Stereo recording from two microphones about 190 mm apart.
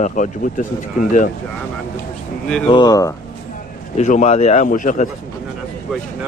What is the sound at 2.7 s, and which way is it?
Speech, 20° left (ahead or behind).